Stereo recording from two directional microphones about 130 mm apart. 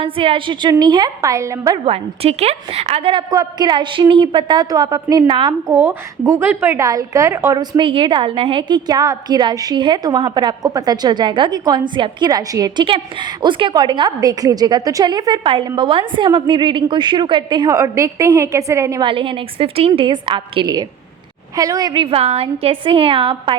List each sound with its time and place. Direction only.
0.0 s a woman's voice: 40° right (ahead or behind); by 1.8 s 25° right (ahead or behind)
1.8 s a woman's voice: 50° right (ahead or behind)
5.6 s a woman's voice: 25° right (ahead or behind)
19.0 s a woman's voice: 40° right (ahead or behind)
21.5 s a woman's voice: 25° right (ahead or behind)